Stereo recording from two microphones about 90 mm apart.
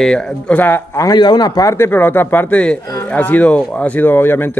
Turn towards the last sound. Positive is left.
turn(degrees=25)  # may be behind; listen again after turning